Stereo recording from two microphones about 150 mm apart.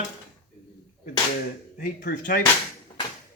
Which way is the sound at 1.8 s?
75° left (ahead or behind).